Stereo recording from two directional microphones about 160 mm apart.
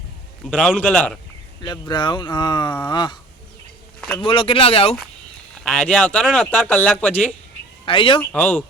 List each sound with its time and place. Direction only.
0.5 s speech: 5° left (ahead or behind)
1.6 s speech: 30° left (ahead or behind)
4.2 s speech: 35° left (ahead or behind)
5.6 s speech: 5° left (ahead or behind)
7.9 s speech: 30° left (ahead or behind)
8.2 s speech: 10° left (ahead or behind)